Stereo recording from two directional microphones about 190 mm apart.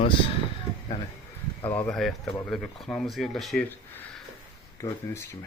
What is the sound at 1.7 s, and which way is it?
Speech, 5° left (ahead or behind).